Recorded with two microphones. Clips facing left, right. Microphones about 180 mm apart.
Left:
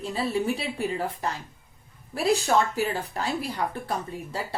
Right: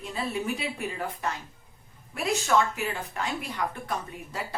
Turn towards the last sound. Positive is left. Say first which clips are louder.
# left 3 dB
turn(degrees=30)  # may be behind; listen again after turning